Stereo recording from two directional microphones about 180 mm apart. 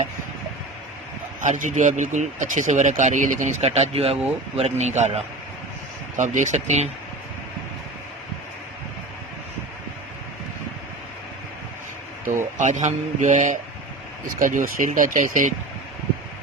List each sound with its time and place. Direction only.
1.4 s speech: 45° right (ahead or behind)
12.5 s speech: 40° right (ahead or behind)